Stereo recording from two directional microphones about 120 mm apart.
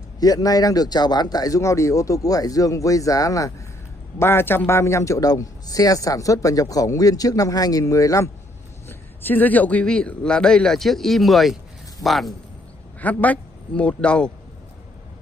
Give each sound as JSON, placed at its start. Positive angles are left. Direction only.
{"t": 0.2, "sound": "a man's voice", "side_deg": 30}
{"t": 8.8, "sound": "a man's voice", "side_deg": 15}
{"t": 13.0, "sound": "a man's voice", "side_deg": 15}